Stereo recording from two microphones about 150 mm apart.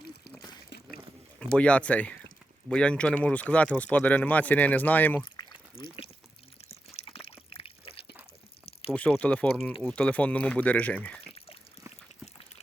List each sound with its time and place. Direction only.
0.3 s a sound: 25° left (ahead or behind)
1.5 s speech: 10° left (ahead or behind)
5.4 s pour: 35° left (ahead or behind)
6.7 s water: 40° left (ahead or behind)
8.9 s speech: 10° left (ahead or behind)
11.3 s a sound: 40° left (ahead or behind)